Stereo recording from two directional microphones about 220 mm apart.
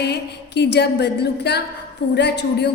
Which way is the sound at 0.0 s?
50° left (ahead or behind).